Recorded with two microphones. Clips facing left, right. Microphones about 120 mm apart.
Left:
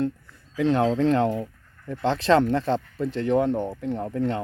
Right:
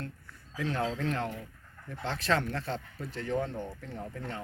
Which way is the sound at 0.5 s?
90° left.